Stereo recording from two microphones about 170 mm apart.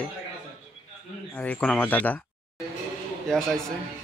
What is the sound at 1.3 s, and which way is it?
Speech, 10° left (ahead or behind).